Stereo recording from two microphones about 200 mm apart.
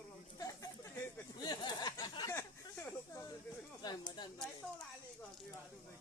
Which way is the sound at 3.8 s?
20° left (ahead or behind).